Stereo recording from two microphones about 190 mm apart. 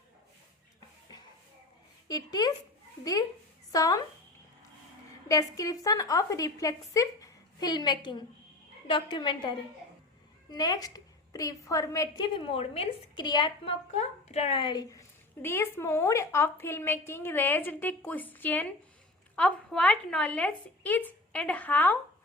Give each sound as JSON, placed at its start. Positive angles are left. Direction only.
{"t": 2.0, "sound": "a woman's voice", "side_deg": 20}
{"t": 5.3, "sound": "a woman's voice", "side_deg": 20}